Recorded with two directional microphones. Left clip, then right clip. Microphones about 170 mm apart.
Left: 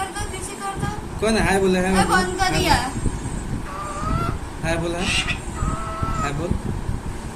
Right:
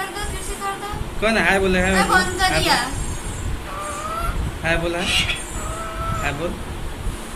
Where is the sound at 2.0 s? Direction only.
45° left (ahead or behind).